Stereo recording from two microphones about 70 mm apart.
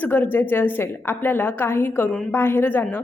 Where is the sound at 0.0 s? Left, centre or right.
Left.